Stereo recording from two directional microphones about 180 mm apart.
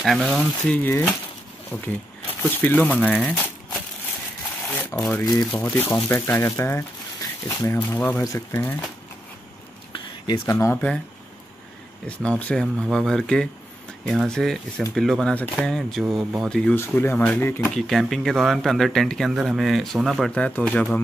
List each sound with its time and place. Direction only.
0.0 s speech: centre (ahead or behind)
0.8 s speech: 10° left (ahead or behind)
3.1 s crumpling: 5° left (ahead or behind)
4.6 s a sound: 10° left (ahead or behind)
5.5 s speech: 10° left (ahead or behind)
9.9 s a sound: 25° left (ahead or behind)
10.4 s speech: 15° left (ahead or behind)
12.2 s speech: 5° left (ahead or behind)
17.7 s speech: centre (ahead or behind)